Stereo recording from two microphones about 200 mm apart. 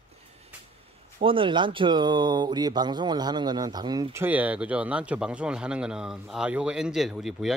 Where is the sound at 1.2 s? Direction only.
25° right (ahead or behind).